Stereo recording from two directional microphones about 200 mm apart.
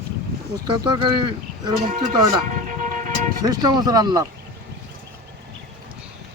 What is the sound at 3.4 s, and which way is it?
Speech, 20° right (ahead or behind).